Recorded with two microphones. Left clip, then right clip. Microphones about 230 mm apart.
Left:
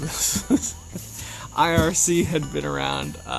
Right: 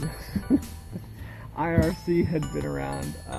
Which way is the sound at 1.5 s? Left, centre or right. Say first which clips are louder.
Left 6 dB; left.